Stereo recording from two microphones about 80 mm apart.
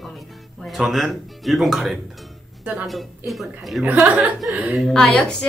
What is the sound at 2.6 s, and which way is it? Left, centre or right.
Speech, centre.